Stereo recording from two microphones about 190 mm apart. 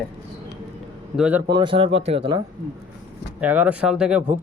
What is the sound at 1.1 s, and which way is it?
Speech, 5° right (ahead or behind).